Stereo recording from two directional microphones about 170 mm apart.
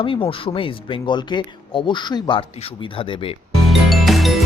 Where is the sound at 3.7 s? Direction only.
Centre (ahead or behind).